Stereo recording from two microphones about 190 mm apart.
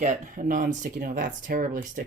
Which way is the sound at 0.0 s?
45° right (ahead or behind).